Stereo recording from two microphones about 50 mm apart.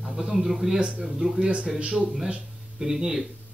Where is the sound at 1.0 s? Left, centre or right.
Centre.